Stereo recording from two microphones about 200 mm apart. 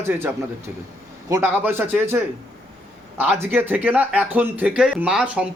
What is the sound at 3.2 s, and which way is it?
Speech, 10° right (ahead or behind).